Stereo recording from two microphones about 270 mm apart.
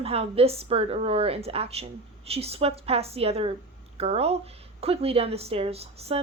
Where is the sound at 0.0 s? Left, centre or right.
Right.